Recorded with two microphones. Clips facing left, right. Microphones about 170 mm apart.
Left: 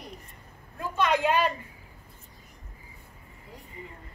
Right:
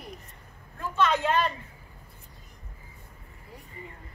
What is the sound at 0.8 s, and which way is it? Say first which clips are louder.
Vehicle: even; 15° left (ahead or behind).